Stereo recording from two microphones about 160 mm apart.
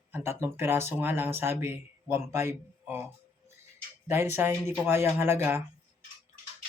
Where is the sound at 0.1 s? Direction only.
15° right (ahead or behind).